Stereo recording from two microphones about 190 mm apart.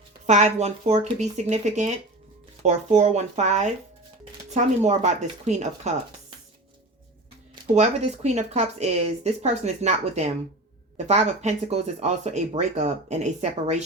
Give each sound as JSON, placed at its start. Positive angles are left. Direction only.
{"t": 0.3, "sound": "speech", "side_deg": -35}
{"t": 7.8, "sound": "speech", "side_deg": -35}